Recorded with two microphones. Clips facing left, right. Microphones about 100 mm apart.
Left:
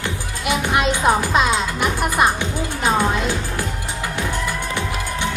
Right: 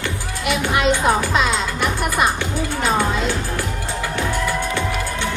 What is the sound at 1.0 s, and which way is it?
Music, 20° left (ahead or behind).